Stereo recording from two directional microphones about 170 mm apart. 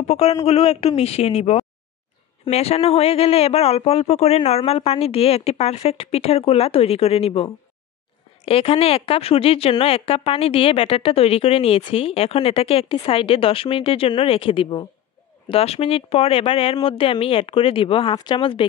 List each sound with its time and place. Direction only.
0.0 s a woman's voice: 40° left (ahead or behind)